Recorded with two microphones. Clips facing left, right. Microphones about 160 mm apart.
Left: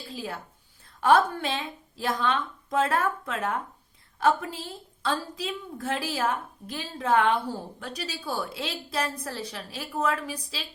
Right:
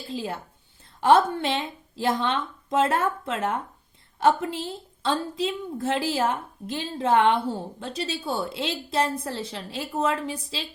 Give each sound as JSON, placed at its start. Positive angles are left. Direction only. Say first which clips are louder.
{"t": 0.1, "sound": "a woman's voice", "louder": "right 5 dB", "side_deg": -25}